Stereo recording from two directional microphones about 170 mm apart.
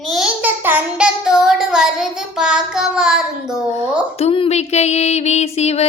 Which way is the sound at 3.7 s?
35° left (ahead or behind).